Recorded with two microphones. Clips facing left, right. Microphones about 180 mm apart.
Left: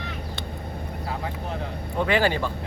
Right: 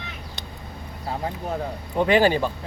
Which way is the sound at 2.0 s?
15° right (ahead or behind).